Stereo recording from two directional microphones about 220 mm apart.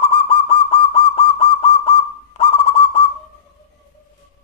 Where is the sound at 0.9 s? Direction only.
25° left (ahead or behind).